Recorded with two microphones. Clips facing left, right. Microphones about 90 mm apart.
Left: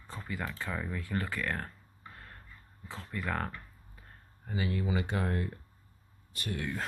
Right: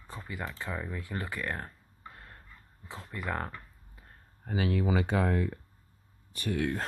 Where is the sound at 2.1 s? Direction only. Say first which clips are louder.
Even; 25° right (ahead or behind).